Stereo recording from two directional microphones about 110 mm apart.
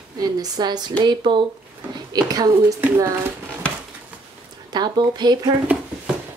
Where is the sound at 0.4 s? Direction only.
40° right (ahead or behind).